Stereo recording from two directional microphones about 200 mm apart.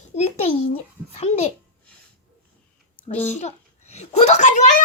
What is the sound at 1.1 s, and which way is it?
Speech, 30° left (ahead or behind).